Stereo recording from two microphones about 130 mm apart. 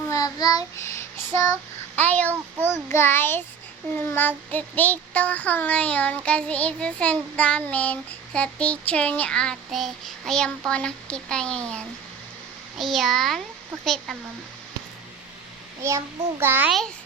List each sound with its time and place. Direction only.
0.1 s child singing: 30° left (ahead or behind)
2.0 s child singing: 10° left (ahead or behind)
12.8 s a child's voice: centre (ahead or behind)
15.8 s a child's voice: 20° right (ahead or behind)